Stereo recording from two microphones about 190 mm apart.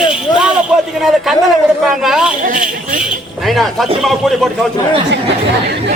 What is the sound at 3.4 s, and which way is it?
Speech, centre (ahead or behind).